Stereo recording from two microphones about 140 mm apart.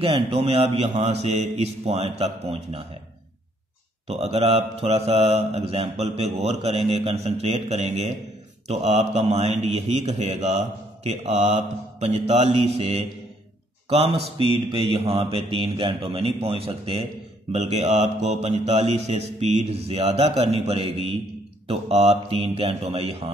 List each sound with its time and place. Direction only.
0.0 s speech: 45° right (ahead or behind)
4.1 s speech: 45° right (ahead or behind)